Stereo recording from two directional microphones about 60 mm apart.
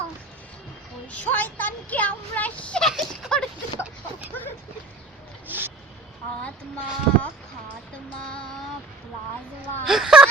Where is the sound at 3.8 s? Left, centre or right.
Right.